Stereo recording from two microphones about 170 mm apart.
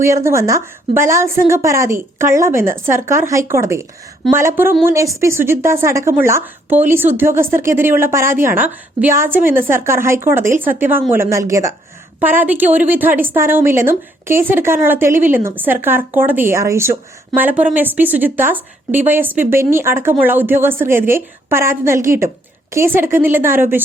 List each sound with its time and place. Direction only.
0.0 s a woman's voice: 15° right (ahead or behind)